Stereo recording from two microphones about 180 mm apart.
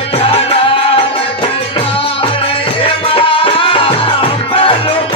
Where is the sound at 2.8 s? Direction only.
30° left (ahead or behind).